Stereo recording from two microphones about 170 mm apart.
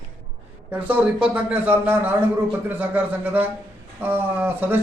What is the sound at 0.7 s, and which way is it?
A man's voice, 10° right (ahead or behind).